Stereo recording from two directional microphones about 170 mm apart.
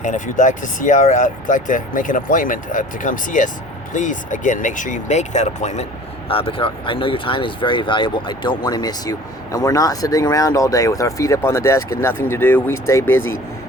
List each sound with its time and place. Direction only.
0.0 s speech: 50° left (ahead or behind); by 13.3 s 15° left (ahead or behind)